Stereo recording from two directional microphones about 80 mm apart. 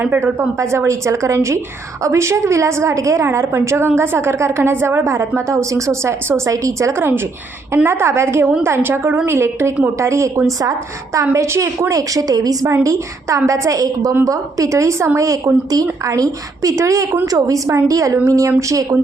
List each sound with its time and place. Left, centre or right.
0.0 s a woman's voice: right
0.6 s a woman's voice: right
12.6 s a woman's voice: right